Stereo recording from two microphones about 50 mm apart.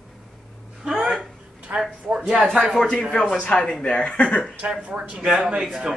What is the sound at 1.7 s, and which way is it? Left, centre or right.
Speech, right.